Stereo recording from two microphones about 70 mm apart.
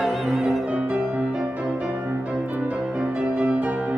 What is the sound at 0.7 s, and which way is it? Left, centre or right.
Music, right.